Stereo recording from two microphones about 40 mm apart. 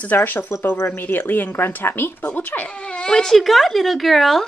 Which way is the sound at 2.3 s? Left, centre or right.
Left.